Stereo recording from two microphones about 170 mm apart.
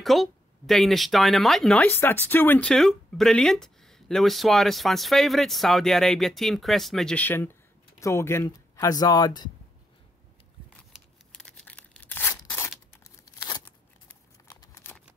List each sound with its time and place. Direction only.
0.0 s speech: centre (ahead or behind); by 9.5 s 25° left (ahead or behind)
10.9 s tearing: 5° left (ahead or behind); by 13.6 s 25° left (ahead or behind)
14.0 s a sound: 20° left (ahead or behind)